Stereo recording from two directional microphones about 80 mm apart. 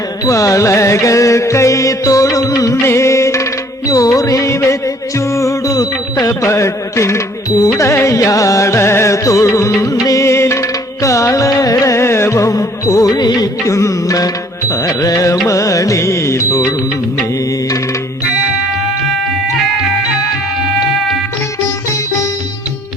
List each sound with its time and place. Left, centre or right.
0.3 s music: left
13.7 s music: left